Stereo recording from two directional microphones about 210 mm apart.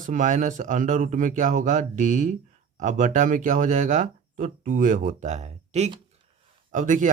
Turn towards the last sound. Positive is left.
turn(degrees=-40)  # may be behind; listen again after turning